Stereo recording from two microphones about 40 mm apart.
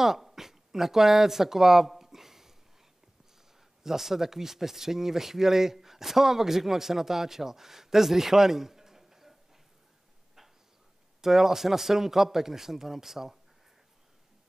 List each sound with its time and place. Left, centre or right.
0.0 s a sound: centre
3.8 s speech: centre
11.1 s speech: centre